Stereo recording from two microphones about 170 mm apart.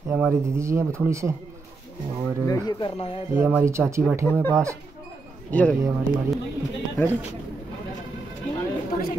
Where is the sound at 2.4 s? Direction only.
20° left (ahead or behind).